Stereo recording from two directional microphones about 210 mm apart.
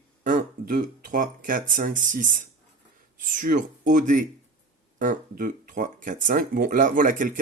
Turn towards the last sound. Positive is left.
turn(degrees=-40)  # may be behind; listen again after turning